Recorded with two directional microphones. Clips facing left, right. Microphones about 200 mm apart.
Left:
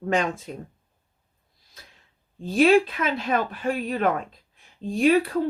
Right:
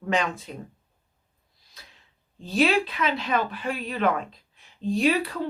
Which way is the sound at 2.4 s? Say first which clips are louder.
Left 5 dB; 50° left (ahead or behind).